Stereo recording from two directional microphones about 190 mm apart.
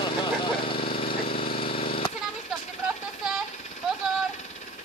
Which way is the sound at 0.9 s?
30° left (ahead or behind).